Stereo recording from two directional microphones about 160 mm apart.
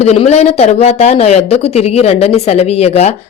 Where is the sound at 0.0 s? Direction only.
40° left (ahead or behind).